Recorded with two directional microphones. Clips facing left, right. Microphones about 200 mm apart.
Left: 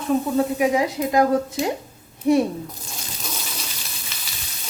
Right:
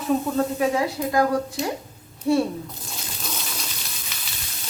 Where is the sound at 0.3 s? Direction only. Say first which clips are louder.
Left 2 dB; 15° left (ahead or behind).